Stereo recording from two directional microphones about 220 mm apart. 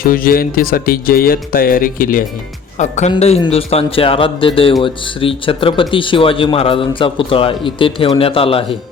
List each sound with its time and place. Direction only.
0.0 s speech: 40° left (ahead or behind); by 8.6 s 25° left (ahead or behind)